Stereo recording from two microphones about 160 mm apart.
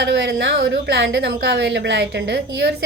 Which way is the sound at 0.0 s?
90° right.